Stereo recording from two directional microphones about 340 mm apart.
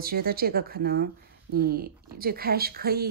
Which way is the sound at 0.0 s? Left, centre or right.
Right.